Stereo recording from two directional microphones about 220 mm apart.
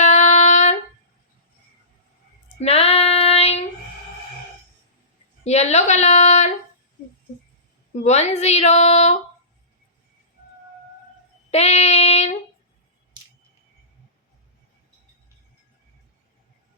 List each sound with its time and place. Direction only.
0.0 s a sound: 30° left (ahead or behind)
2.6 s child singing: 30° left (ahead or behind)
5.4 s a woman's voice: 30° left (ahead or behind)
8.0 s a woman's voice: 30° left (ahead or behind)
11.5 s child singing: 30° left (ahead or behind)